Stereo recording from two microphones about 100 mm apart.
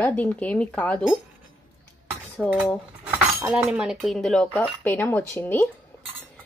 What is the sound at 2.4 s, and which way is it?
A woman's voice, 15° right (ahead or behind).